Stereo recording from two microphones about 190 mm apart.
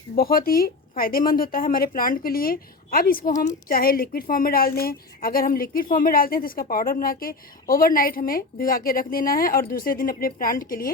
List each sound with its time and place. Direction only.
0.2 s a woman's voice: 50° left (ahead or behind)